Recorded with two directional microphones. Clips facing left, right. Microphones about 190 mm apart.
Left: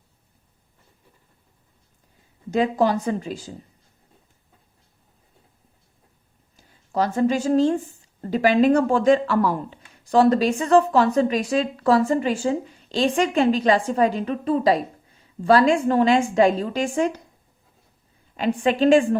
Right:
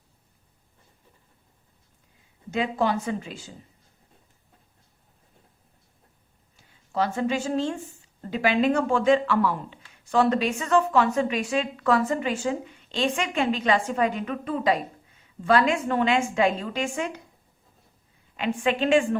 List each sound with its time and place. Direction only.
2.5 s speech: 40° left (ahead or behind)
6.6 s speech: 40° left (ahead or behind)
18.3 s speech: 40° left (ahead or behind)